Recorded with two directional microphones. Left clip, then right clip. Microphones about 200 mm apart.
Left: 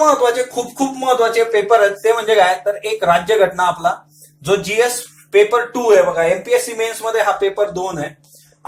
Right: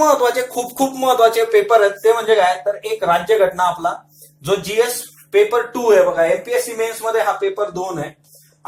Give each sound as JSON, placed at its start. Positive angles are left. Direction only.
{"t": 0.0, "sound": "speech", "side_deg": -30}
{"t": 2.0, "sound": "speech", "side_deg": -10}